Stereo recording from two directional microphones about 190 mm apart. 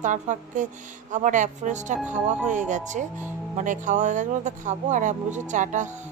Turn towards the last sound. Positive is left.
turn(degrees=-40)  # may be behind; listen again after turning